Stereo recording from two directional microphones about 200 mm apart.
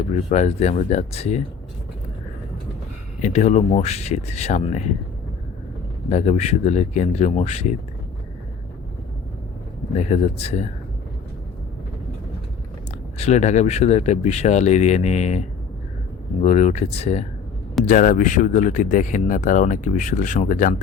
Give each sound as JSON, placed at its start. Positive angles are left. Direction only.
{"t": 0.1, "sound": "speech", "side_deg": 35}
{"t": 3.2, "sound": "speech", "side_deg": 35}
{"t": 6.1, "sound": "speech", "side_deg": 35}
{"t": 9.9, "sound": "speech", "side_deg": 35}
{"t": 13.1, "sound": "speech", "side_deg": 35}